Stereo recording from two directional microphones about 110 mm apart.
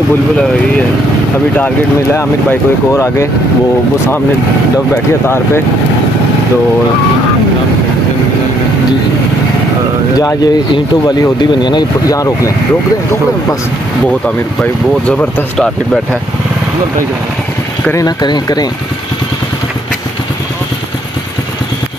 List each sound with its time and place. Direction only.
2.9 s speech: 25° left (ahead or behind)
10.1 s speech: 35° left (ahead or behind)
14.2 s speech: 10° left (ahead or behind)
17.9 s speech: 40° left (ahead or behind)